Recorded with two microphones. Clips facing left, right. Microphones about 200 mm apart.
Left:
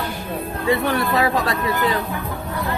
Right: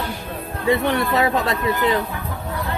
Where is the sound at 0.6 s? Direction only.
25° right (ahead or behind).